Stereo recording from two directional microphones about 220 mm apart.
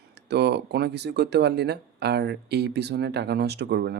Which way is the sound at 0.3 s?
50° right (ahead or behind).